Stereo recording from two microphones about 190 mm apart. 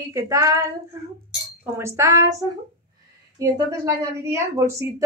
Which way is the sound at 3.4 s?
15° right (ahead or behind).